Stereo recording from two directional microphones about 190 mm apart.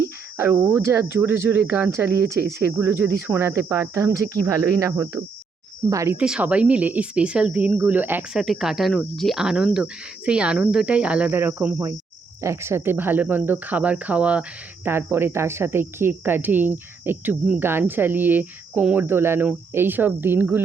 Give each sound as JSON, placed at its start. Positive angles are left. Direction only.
{"t": 0.3, "sound": "speech", "side_deg": -10}
{"t": 6.2, "sound": "speech", "side_deg": -5}